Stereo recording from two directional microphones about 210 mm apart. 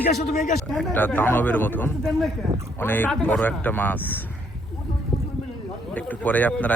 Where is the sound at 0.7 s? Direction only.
5° left (ahead or behind).